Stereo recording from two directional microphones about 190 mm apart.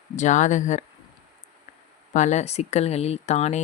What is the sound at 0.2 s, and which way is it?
Speech, 40° left (ahead or behind).